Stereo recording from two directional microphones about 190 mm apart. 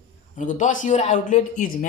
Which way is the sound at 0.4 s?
40° left (ahead or behind).